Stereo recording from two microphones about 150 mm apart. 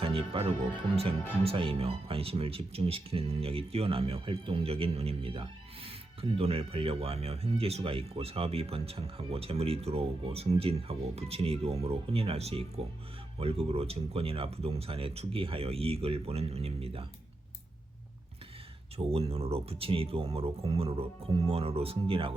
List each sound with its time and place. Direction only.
0.0 s speech: 40° right (ahead or behind)
18.9 s speech: 40° right (ahead or behind)